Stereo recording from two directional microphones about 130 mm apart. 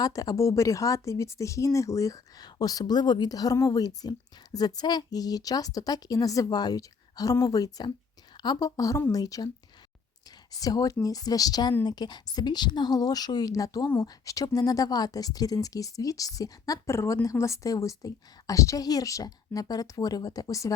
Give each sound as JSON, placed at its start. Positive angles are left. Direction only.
{"t": 0.0, "sound": "a woman's voice", "side_deg": 25}
{"t": 10.5, "sound": "a woman's voice", "side_deg": 30}